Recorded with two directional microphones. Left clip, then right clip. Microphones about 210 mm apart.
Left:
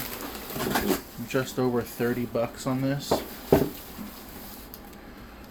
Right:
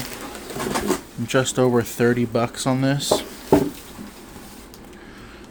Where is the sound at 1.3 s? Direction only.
55° right (ahead or behind).